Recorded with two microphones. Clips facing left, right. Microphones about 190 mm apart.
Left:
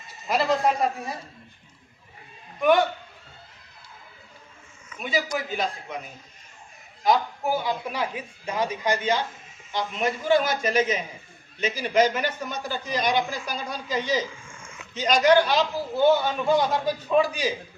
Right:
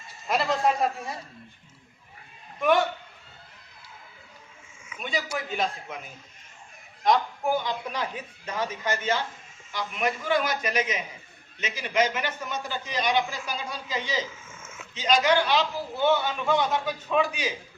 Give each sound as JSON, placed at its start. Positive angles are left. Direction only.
{"t": 0.3, "sound": "a sound", "side_deg": 0}
{"t": 2.6, "sound": "a man's voice", "side_deg": 0}
{"t": 4.9, "sound": "a man's voice", "side_deg": 5}
{"t": 9.7, "sound": "a man's voice", "side_deg": 25}
{"t": 14.3, "sound": "a sound", "side_deg": -5}
{"t": 14.9, "sound": "a man's voice", "side_deg": 40}